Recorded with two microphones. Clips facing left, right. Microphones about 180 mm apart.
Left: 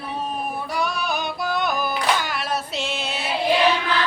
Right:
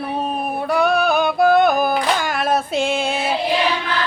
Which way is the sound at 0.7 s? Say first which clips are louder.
Right 11 dB; 55° right (ahead or behind).